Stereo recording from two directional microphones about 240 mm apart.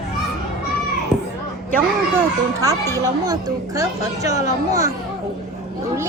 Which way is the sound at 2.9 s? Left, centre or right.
Centre.